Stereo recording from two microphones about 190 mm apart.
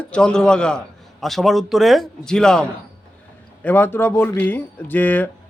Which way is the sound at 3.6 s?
10° left (ahead or behind).